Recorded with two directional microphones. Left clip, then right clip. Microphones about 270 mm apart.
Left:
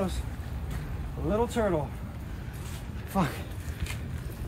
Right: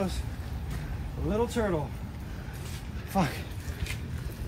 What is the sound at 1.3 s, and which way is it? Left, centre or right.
Speech, left.